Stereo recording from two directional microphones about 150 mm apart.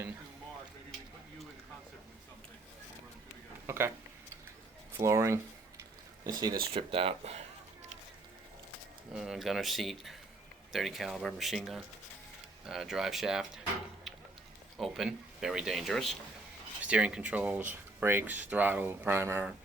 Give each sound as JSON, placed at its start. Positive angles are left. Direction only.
{"t": 3.7, "sound": "speech", "side_deg": -15}
{"t": 4.9, "sound": "speech", "side_deg": -20}
{"t": 6.7, "sound": "speech", "side_deg": -40}
{"t": 9.1, "sound": "speech", "side_deg": -5}
{"t": 14.8, "sound": "speech", "side_deg": -5}